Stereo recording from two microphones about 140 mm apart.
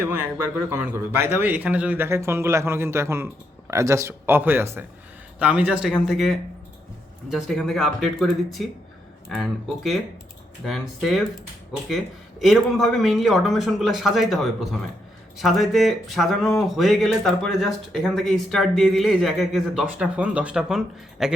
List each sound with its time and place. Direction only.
0.0 s a man's voice: 15° right (ahead or behind)
12.4 s speech: centre (ahead or behind)